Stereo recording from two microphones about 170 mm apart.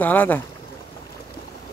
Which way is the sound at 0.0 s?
10° left (ahead or behind).